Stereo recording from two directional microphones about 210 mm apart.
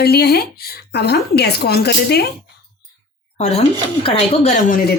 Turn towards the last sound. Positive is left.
turn(degrees=40)  # may be behind; listen again after turning